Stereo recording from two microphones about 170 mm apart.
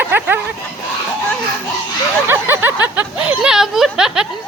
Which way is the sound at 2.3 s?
15° right (ahead or behind).